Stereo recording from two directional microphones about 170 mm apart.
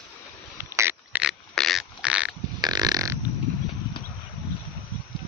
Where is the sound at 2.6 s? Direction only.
25° right (ahead or behind).